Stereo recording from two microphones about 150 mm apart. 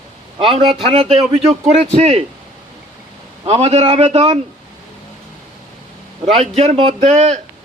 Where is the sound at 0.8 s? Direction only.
40° right (ahead or behind).